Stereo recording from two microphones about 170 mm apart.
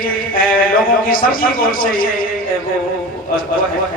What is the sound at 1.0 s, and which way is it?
A man's voice, 55° left (ahead or behind).